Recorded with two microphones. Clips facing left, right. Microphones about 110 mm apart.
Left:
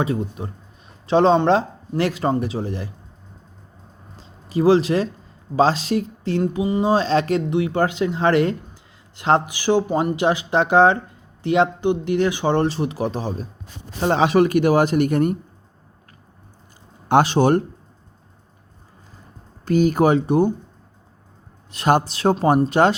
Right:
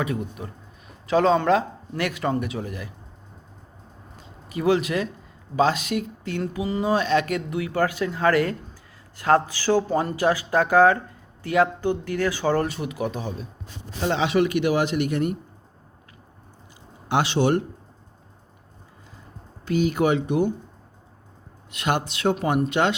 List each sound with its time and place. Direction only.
0.0 s speech: 30° left (ahead or behind)
4.2 s a sound: 30° left (ahead or behind)
5.5 s a man's voice: 30° left (ahead or behind)
17.1 s a man's voice: 45° left (ahead or behind)
19.6 s speech: 40° left (ahead or behind)
21.7 s speech: 35° left (ahead or behind)